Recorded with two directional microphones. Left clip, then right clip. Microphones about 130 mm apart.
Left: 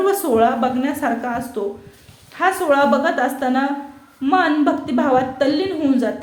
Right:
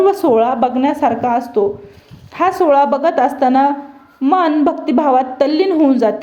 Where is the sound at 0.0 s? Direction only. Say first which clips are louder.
Right 4 dB; 40° right (ahead or behind).